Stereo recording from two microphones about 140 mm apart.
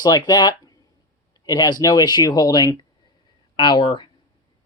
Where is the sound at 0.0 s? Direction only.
30° left (ahead or behind).